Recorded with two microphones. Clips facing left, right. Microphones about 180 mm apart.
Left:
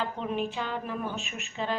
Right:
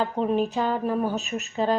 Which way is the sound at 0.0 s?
40° right (ahead or behind).